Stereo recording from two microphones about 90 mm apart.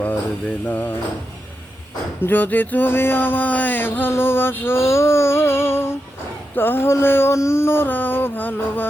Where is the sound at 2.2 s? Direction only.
20° left (ahead or behind).